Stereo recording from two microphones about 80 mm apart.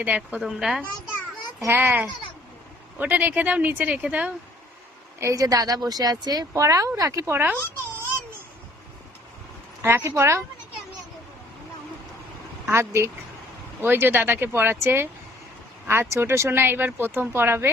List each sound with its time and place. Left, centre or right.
0.1 s speech: centre
0.4 s a woman's voice: centre
1.6 s speech: right
5.2 s a woman's voice: right
6.5 s speech: right
7.3 s speech: right
9.8 s speech: right
12.7 s speech: right